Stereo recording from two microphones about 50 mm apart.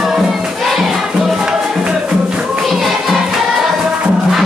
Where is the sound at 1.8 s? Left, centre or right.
Centre.